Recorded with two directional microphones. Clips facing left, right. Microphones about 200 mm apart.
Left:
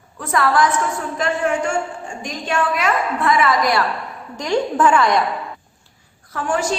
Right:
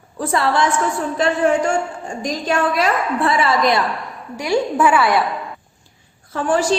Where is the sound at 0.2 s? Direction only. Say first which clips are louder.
Even; 30° right (ahead or behind).